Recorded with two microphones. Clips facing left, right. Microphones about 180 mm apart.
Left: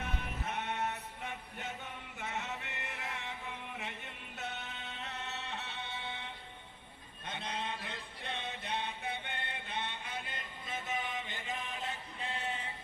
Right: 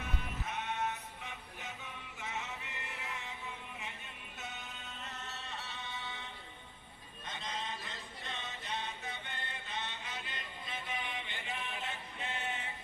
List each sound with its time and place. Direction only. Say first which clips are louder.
0.0 s sheep: left 2 dB; 60° left (ahead or behind)
3.8 s music: left 3 dB; 70° left (ahead or behind)
7.3 s a sound: left 2 dB; 60° left (ahead or behind); by 12.7 s 35° left (ahead or behind)